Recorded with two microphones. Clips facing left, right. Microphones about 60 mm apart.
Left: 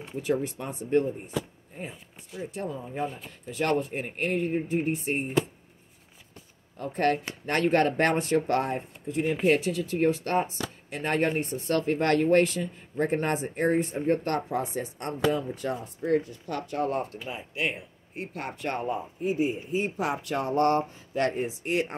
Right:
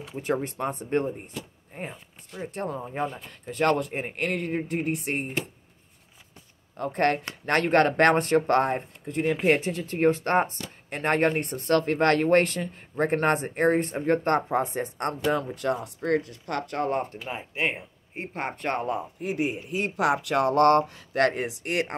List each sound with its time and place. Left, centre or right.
0.2 s speech: right
2.4 s speech: right
6.8 s speech: right
9.6 s speech: right
14.2 s speech: right
15.0 s speech: right
17.3 s speech: right
18.8 s speech: right